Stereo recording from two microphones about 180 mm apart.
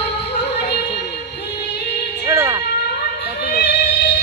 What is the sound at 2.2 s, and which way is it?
Music, 15° right (ahead or behind).